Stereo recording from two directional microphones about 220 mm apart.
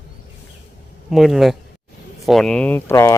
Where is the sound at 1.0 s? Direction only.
Centre (ahead or behind).